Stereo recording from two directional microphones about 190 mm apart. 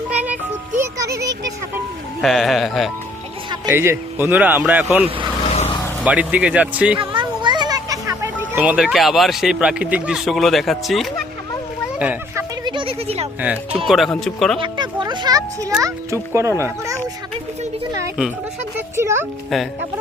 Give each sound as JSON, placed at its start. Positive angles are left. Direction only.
{"t": 0.9, "sound": "a sound", "side_deg": -15}
{"t": 2.2, "sound": "speech", "side_deg": 0}
{"t": 3.7, "sound": "speech", "side_deg": -10}
{"t": 5.5, "sound": "vehicle", "side_deg": 35}
{"t": 6.0, "sound": "speech", "side_deg": -5}
{"t": 7.0, "sound": "a child's voice", "side_deg": -25}
{"t": 11.9, "sound": "a sound", "side_deg": -10}
{"t": 12.6, "sound": "a sound", "side_deg": -25}
{"t": 13.4, "sound": "speech", "side_deg": -10}
{"t": 14.6, "sound": "speech", "side_deg": -25}
{"t": 18.9, "sound": "speech", "side_deg": -15}